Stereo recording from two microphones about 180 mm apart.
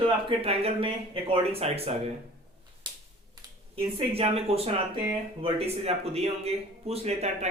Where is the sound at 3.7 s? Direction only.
35° right (ahead or behind).